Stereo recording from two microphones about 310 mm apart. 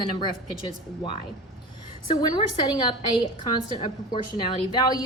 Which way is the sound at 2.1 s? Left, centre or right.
Centre.